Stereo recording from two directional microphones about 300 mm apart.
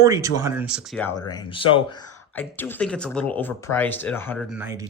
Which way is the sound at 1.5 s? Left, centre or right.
Centre.